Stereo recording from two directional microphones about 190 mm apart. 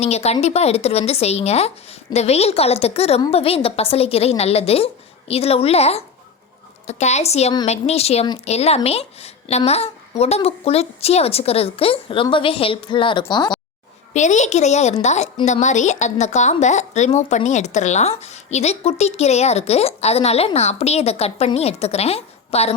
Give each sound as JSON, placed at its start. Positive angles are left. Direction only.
{"t": 0.0, "sound": "a woman's voice", "side_deg": 35}
{"t": 14.1, "sound": "a woman's voice", "side_deg": 40}